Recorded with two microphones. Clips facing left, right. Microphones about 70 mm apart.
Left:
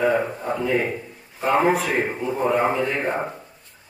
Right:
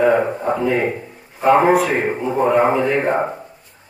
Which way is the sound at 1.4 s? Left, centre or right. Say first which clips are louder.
Right 6 dB; right.